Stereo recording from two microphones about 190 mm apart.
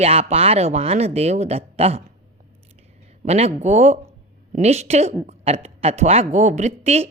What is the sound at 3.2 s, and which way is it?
Speech, 35° right (ahead or behind).